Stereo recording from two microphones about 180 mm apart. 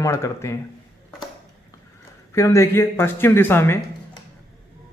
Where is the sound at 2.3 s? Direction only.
15° left (ahead or behind).